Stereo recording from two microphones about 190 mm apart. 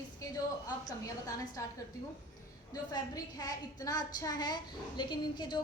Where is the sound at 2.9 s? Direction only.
20° left (ahead or behind).